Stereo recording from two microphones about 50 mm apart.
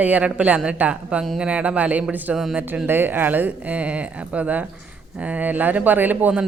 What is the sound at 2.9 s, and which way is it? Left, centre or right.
Speech, right.